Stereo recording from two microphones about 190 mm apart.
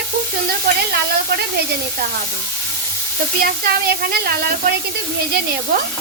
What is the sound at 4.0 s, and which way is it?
Speech, 55° right (ahead or behind).